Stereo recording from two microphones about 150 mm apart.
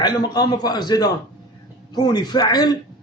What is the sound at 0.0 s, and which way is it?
A man's voice, 30° left (ahead or behind).